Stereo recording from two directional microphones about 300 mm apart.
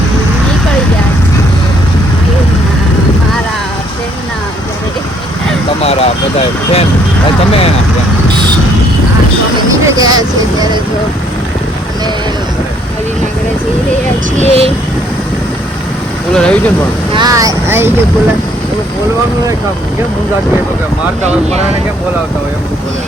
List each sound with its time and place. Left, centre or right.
5.8 s speech: centre
9.6 s speech: centre
14.3 s speech: right
16.3 s speech: centre
17.1 s speech: centre